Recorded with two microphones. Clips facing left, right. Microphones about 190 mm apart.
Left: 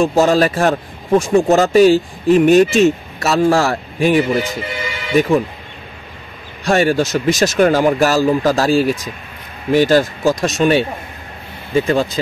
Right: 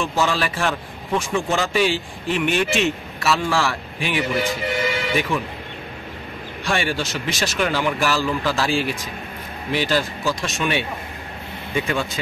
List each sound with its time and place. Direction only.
0.0 s a man's voice: 45° left (ahead or behind)
6.6 s a man's voice: 45° left (ahead or behind)